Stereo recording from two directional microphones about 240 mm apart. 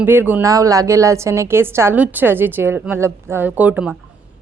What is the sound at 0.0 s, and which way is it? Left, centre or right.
A woman's voice, centre.